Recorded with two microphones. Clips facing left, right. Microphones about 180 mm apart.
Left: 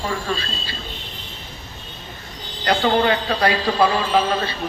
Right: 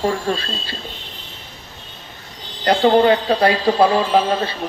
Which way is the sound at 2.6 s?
35° right (ahead or behind).